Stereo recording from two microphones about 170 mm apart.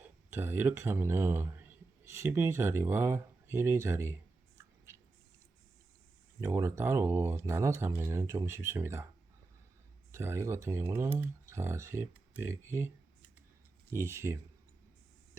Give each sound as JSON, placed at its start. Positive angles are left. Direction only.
{"t": 0.0, "sound": "speech", "side_deg": -15}
{"t": 6.4, "sound": "speech", "side_deg": -15}
{"t": 10.1, "sound": "speech", "side_deg": -15}
{"t": 13.9, "sound": "speech", "side_deg": -15}